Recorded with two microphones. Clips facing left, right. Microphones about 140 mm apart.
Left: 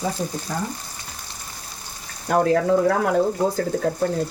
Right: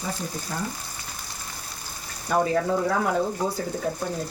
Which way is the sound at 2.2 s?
75° left (ahead or behind).